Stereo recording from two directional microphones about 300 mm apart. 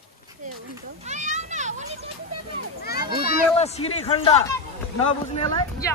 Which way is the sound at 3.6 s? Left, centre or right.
Centre.